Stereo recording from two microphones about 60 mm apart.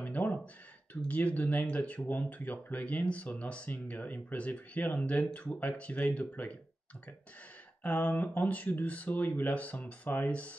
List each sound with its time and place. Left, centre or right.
0.0 s a sound: left
1.0 s speech: left
7.8 s speech: left